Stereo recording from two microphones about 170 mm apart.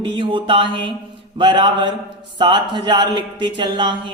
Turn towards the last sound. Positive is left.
turn(degrees=-30)  # may be behind; listen again after turning